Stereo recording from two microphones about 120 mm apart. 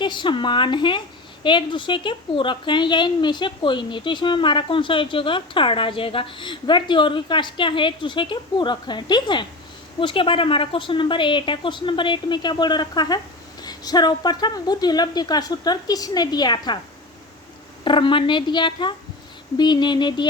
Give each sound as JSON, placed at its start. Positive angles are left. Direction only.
{"t": 0.0, "sound": "a woman's voice", "side_deg": 40}
{"t": 17.8, "sound": "a woman's voice", "side_deg": 45}